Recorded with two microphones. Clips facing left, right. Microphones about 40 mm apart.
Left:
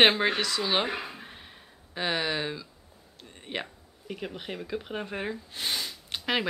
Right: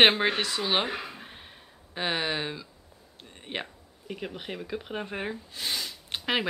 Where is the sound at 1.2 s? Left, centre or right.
Centre.